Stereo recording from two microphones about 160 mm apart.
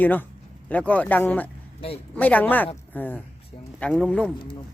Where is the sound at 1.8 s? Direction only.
40° left (ahead or behind).